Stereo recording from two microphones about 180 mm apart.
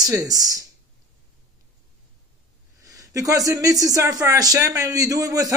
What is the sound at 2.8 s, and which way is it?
Speech, 20° right (ahead or behind).